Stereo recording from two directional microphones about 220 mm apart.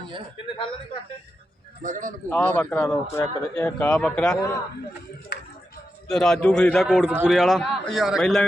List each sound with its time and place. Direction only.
0.4 s a man's voice: 25° left (ahead or behind)
1.8 s a man's voice: 35° right (ahead or behind)
2.3 s a man's voice: 5° left (ahead or behind)
5.3 s a sound: 45° left (ahead or behind)
6.1 s a man's voice: 5° left (ahead or behind)